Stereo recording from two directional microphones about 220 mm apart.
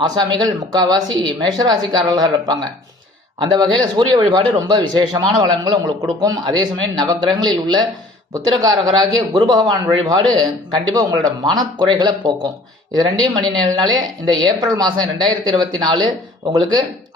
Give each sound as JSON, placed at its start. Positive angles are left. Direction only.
{"t": 0.0, "sound": "a man's voice", "side_deg": -20}